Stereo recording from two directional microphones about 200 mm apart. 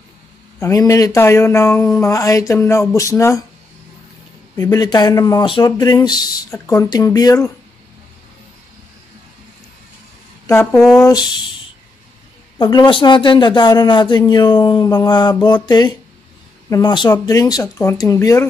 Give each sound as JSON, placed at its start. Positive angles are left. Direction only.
{"t": 0.6, "sound": "speech", "side_deg": 15}
{"t": 4.6, "sound": "speech", "side_deg": 20}
{"t": 10.4, "sound": "speech", "side_deg": 10}
{"t": 10.8, "sound": "speech", "side_deg": 0}
{"t": 11.1, "sound": "speech", "side_deg": 20}
{"t": 12.5, "sound": "speech", "side_deg": 20}